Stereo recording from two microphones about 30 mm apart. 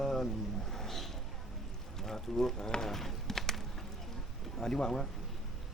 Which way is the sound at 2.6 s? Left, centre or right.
Left.